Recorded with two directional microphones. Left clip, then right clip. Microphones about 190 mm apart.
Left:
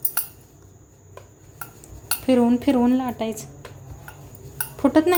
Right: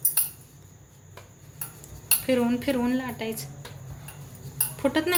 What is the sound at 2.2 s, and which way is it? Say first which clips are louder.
Speech: left 6 dB; 40° left (ahead or behind).